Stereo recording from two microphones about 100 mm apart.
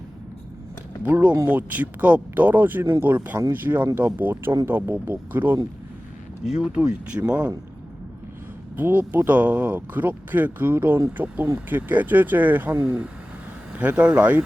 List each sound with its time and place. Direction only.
1.0 s speech: 15° right (ahead or behind)
6.4 s speech: 10° right (ahead or behind)
8.7 s speech: 20° right (ahead or behind)